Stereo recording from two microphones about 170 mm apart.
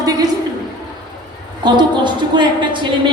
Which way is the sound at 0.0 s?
20° right (ahead or behind).